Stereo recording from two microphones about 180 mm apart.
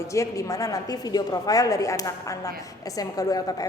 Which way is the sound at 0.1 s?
15° left (ahead or behind).